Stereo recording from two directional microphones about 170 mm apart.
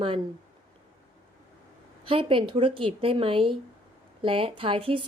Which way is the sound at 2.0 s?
30° right (ahead or behind).